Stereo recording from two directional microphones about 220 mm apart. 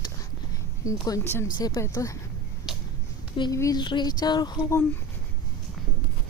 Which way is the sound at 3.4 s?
15° left (ahead or behind).